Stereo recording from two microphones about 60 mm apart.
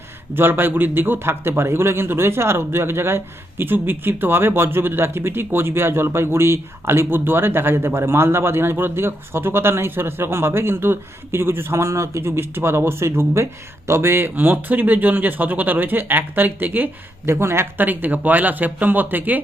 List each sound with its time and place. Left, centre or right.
0.3 s a man's voice: right
17.2 s speech: right
17.8 s speech: right